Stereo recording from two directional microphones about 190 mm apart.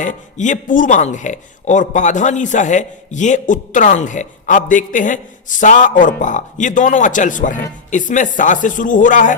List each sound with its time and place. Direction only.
0.0 s speech: 40° left (ahead or behind)